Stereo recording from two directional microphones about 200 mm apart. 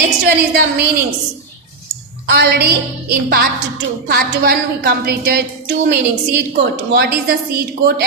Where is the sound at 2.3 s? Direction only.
55° right (ahead or behind).